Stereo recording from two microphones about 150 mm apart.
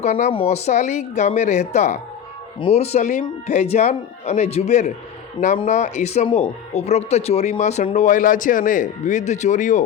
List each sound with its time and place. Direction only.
0.0 s a man's voice: 55° left (ahead or behind)
0.3 s speech: 40° left (ahead or behind)
7.9 s a man's voice: 60° left (ahead or behind)